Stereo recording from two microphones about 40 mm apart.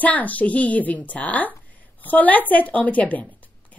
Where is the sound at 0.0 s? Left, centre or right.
Left.